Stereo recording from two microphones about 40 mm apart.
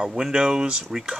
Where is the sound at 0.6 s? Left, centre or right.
Centre.